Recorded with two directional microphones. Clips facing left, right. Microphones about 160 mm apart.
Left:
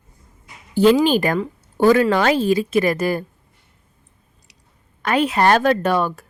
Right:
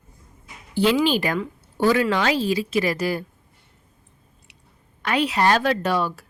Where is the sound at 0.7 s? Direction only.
45° left (ahead or behind).